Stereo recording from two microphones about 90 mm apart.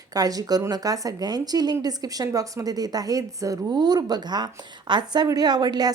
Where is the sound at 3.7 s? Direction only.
50° right (ahead or behind).